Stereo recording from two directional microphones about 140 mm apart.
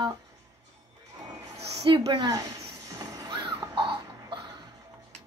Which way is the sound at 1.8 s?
35° right (ahead or behind).